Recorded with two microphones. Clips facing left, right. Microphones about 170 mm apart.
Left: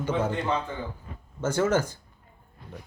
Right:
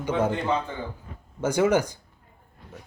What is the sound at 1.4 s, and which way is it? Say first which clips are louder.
Speech: right 3 dB; 15° right (ahead or behind).